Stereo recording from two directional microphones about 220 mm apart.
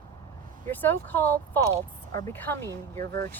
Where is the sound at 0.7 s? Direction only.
10° left (ahead or behind).